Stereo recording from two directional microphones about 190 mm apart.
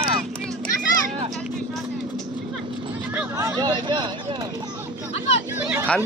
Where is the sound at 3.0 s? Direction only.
10° right (ahead or behind); by 4.7 s 25° right (ahead or behind).